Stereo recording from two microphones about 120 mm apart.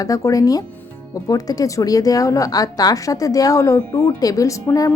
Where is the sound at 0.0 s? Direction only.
25° left (ahead or behind).